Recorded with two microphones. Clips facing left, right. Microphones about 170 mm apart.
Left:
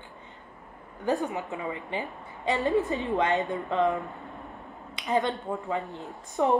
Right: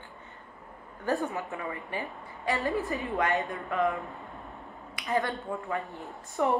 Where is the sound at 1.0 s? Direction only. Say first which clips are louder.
Left 2 dB; 20° left (ahead or behind).